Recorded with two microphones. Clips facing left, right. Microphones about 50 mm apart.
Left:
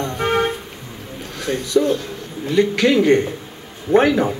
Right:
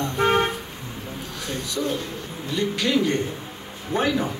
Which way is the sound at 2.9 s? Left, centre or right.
Left.